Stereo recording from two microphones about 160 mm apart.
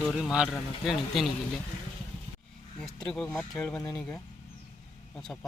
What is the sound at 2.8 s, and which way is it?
Speech, 5° left (ahead or behind).